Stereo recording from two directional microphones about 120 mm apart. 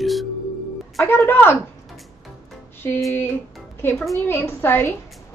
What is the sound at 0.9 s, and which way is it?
Speech, 20° left (ahead or behind).